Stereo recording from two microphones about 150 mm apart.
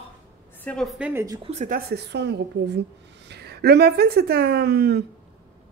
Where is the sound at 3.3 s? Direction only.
90° right.